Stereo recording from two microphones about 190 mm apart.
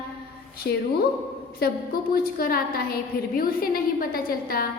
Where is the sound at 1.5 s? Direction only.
55° left (ahead or behind).